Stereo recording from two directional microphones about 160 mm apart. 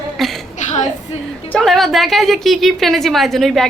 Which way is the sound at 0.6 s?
50° left (ahead or behind).